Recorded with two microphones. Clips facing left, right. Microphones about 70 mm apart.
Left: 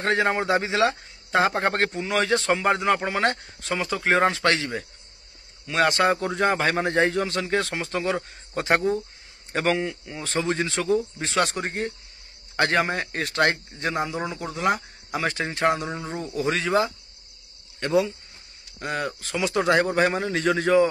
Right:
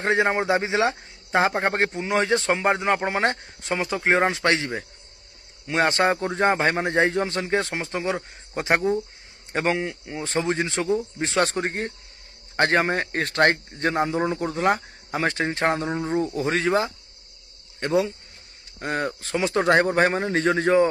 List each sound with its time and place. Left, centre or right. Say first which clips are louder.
0.0 s a man's voice: right 1 dB; centre
11.4 s a man's voice: right 2 dB; right
16.0 s a man's voice: right 7 dB; right
16.3 s a man's voice: left 3 dB; right